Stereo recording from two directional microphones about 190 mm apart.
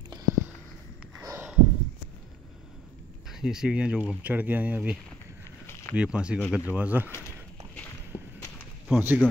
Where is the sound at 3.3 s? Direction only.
Centre (ahead or behind).